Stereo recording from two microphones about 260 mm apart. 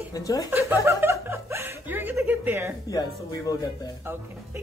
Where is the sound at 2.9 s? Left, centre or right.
Centre.